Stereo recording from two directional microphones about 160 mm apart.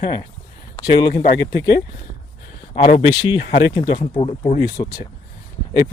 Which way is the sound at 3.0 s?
25° left (ahead or behind).